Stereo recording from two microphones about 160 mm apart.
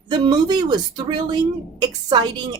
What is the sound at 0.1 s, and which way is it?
A woman's voice, 25° right (ahead or behind).